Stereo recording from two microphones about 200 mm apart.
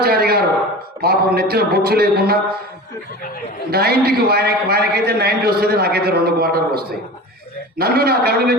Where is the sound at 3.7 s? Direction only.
50° right (ahead or behind).